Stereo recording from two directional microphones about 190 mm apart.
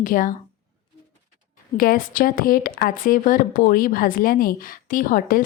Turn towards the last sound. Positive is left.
turn(degrees=45)  # may be behind; listen again after turning